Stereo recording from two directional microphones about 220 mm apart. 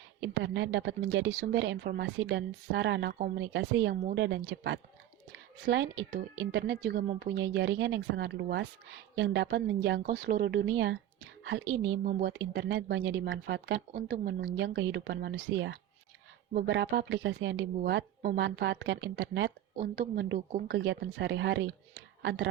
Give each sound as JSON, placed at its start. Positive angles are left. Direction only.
{"t": 0.2, "sound": "speech", "side_deg": -55}